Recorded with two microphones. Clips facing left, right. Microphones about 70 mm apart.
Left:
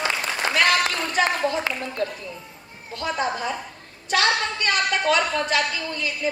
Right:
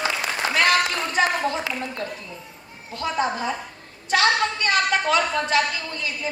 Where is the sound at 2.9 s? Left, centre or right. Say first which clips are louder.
Right 1 dB; right.